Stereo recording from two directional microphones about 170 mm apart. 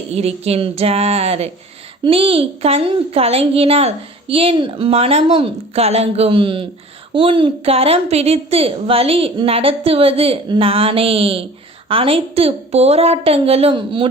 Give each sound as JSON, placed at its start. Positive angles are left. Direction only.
{"t": 0.1, "sound": "a woman's voice", "side_deg": -35}